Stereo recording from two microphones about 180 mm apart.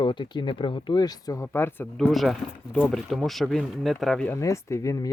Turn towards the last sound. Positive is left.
turn(degrees=15)  # may be behind; listen again after turning